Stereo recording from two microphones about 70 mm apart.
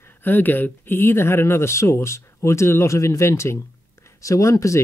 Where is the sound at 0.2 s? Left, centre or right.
Left.